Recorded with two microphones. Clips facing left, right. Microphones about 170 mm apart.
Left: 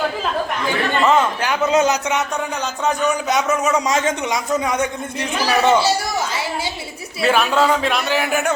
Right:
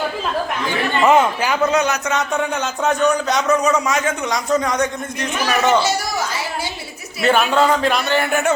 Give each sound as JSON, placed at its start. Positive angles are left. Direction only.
{"t": 1.0, "sound": "speech", "side_deg": -15}
{"t": 1.7, "sound": "a man's voice", "side_deg": 15}
{"t": 2.3, "sound": "speech", "side_deg": -5}
{"t": 3.8, "sound": "a man's voice", "side_deg": 20}
{"t": 4.3, "sound": "a man's voice", "side_deg": 5}
{"t": 7.3, "sound": "speech", "side_deg": 0}